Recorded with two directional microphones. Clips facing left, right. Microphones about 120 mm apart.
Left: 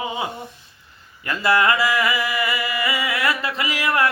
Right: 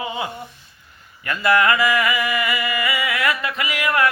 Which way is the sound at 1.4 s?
30° left (ahead or behind).